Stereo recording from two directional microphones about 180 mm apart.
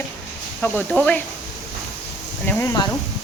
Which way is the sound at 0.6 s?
10° left (ahead or behind).